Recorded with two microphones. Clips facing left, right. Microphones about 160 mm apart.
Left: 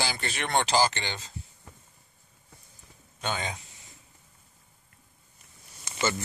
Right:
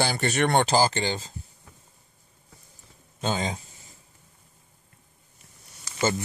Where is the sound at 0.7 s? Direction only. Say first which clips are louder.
Right 3 dB; 35° right (ahead or behind).